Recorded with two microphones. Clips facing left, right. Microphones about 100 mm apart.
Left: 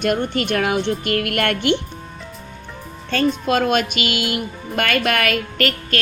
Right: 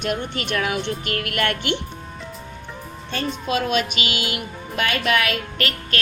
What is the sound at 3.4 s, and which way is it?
A woman's voice, 60° left (ahead or behind).